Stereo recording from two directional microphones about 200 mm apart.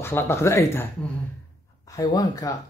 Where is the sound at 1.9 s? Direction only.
15° left (ahead or behind).